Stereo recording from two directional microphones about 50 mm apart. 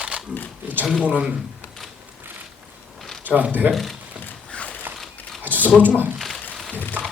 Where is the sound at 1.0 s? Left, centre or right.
Right.